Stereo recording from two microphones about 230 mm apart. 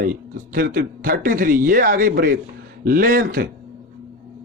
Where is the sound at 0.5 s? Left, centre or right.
Right.